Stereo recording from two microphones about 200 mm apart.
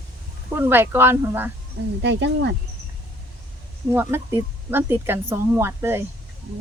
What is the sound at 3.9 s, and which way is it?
Speech, 10° right (ahead or behind).